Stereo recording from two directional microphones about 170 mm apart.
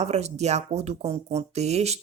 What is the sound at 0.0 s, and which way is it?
Speech, 40° right (ahead or behind).